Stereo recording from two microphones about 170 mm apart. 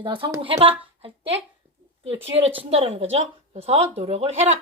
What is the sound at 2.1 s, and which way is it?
Speech, 35° right (ahead or behind).